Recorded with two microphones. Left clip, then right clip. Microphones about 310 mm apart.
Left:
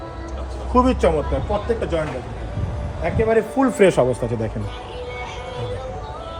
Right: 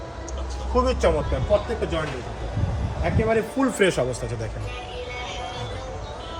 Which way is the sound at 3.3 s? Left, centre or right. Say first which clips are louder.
Left 5 dB; centre.